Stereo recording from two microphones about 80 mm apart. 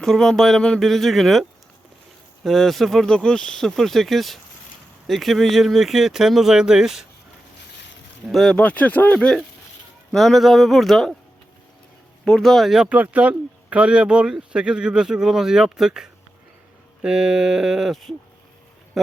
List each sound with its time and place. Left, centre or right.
0.0 s speech: centre
8.3 s speech: centre
8.5 s speech: centre
12.2 s speech: centre
12.9 s speech: centre